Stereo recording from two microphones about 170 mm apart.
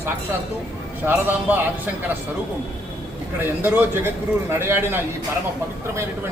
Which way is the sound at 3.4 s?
10° right (ahead or behind).